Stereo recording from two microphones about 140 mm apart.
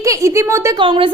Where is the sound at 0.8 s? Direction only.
35° right (ahead or behind).